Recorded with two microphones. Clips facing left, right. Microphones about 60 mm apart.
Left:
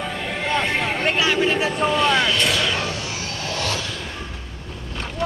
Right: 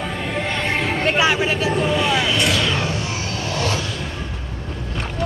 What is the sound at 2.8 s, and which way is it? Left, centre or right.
Vehicle, right.